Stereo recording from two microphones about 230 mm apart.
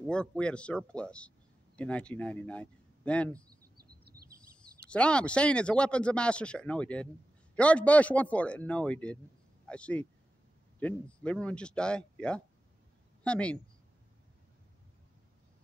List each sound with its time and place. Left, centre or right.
0.0 s speech: centre
3.7 s bird vocalization: right
4.7 s speech: centre